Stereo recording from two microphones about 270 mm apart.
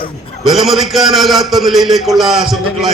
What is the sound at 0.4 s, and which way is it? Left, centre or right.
A man's voice, centre.